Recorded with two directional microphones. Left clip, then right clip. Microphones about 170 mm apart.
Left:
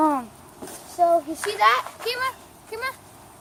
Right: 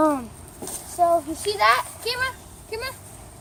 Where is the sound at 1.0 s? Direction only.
10° left (ahead or behind); by 2.9 s 30° left (ahead or behind).